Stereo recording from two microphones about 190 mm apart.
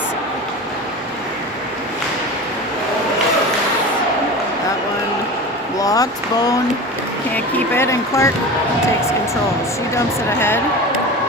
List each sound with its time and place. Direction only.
5.8 s speech: 20° left (ahead or behind)
9.9 s speech: 15° left (ahead or behind)